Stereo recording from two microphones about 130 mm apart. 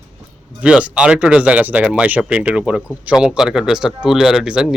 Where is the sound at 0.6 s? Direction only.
10° right (ahead or behind).